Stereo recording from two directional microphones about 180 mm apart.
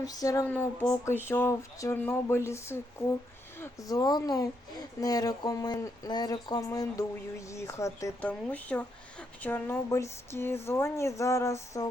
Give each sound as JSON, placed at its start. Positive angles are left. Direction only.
{"t": 0.0, "sound": "speech", "side_deg": 20}